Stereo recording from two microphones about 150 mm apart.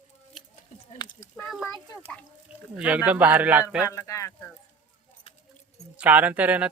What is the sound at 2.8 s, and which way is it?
Speech, 10° right (ahead or behind).